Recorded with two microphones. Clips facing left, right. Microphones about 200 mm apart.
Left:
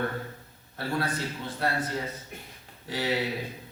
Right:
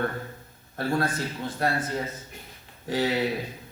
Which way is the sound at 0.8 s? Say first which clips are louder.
Right 4 dB; 45° right (ahead or behind).